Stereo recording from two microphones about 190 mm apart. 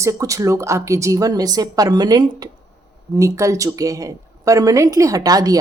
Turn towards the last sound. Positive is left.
turn(degrees=-20)  # may be behind; listen again after turning